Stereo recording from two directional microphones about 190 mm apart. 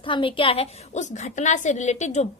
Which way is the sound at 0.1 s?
25° left (ahead or behind).